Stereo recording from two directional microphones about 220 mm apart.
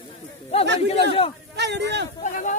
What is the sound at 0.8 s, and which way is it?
Speech, 25° left (ahead or behind).